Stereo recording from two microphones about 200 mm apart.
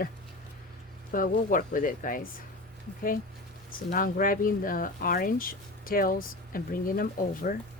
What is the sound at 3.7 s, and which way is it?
Speech, 45° left (ahead or behind).